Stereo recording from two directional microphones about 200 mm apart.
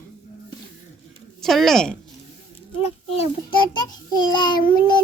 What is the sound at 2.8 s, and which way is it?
Speech, 30° left (ahead or behind).